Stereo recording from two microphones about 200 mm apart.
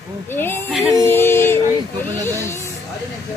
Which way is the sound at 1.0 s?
10° left (ahead or behind).